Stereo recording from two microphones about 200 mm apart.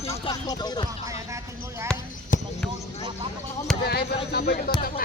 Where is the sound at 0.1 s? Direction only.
20° left (ahead or behind).